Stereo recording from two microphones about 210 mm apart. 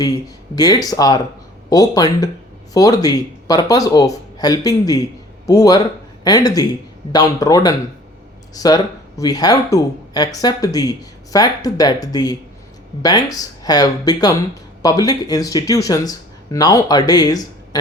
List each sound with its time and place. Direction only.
0.5 s speech: 20° left (ahead or behind)